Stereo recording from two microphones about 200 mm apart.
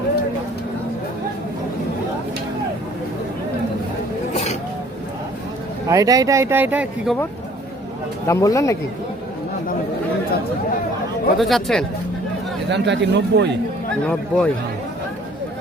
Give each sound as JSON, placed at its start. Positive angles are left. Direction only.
{"t": 5.9, "sound": "speech", "side_deg": -15}
{"t": 8.3, "sound": "speech", "side_deg": 15}
{"t": 11.3, "sound": "speech", "side_deg": 0}
{"t": 12.6, "sound": "speech", "side_deg": -60}
{"t": 14.0, "sound": "speech", "side_deg": 5}